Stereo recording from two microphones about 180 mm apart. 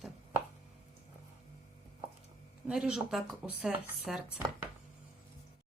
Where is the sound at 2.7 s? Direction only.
5° right (ahead or behind).